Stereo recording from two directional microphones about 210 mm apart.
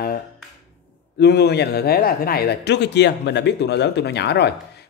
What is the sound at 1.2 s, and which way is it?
Speech, 50° left (ahead or behind).